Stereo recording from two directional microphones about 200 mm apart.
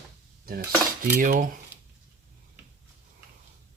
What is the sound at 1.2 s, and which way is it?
Cutlery, 40° right (ahead or behind).